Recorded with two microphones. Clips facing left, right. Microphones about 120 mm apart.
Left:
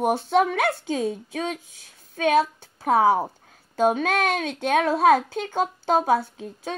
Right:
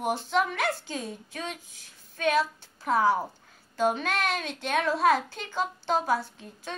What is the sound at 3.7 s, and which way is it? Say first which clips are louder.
A woman's voice: left 6 dB; 55° left (ahead or behind).